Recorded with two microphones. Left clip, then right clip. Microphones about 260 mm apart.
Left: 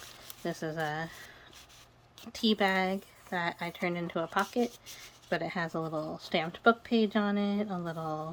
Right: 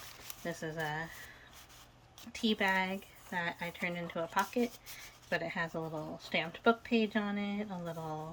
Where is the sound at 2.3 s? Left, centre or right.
Centre.